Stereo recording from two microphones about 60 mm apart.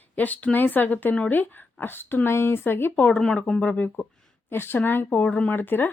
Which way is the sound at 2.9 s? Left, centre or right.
Left.